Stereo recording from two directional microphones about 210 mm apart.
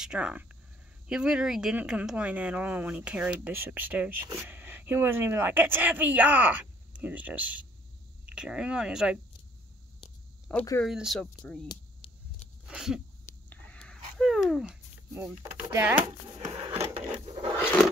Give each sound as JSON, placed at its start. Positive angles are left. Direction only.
{"t": 0.0, "sound": "speech", "side_deg": -5}
{"t": 10.5, "sound": "speech", "side_deg": 15}
{"t": 10.8, "sound": "speech", "side_deg": 0}
{"t": 11.6, "sound": "a sound", "side_deg": 25}
{"t": 12.6, "sound": "speech", "side_deg": 0}
{"t": 16.4, "sound": "a sound", "side_deg": -15}